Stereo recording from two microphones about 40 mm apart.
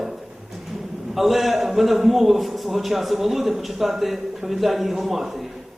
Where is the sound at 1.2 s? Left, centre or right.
Centre.